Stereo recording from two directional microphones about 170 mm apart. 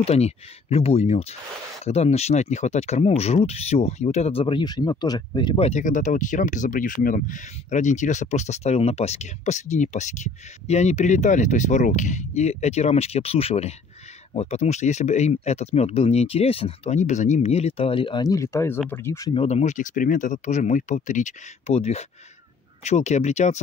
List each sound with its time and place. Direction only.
0.0 s speech: 40° left (ahead or behind)
5.6 s speech: 40° left (ahead or behind); by 19.3 s 15° left (ahead or behind)
19.3 s speech: 40° left (ahead or behind)